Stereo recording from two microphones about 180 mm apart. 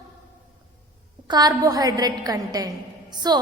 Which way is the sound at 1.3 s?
20° right (ahead or behind).